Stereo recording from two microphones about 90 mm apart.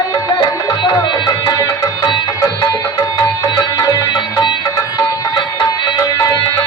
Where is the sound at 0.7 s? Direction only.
50° left (ahead or behind).